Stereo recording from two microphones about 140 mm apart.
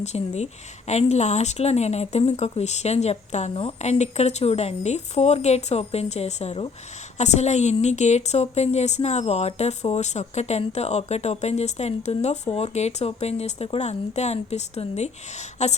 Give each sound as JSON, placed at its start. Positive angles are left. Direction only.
{"t": 0.0, "sound": "a woman's voice", "side_deg": 50}